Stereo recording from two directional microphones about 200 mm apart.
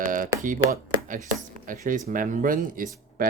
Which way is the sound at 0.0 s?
40° right (ahead or behind).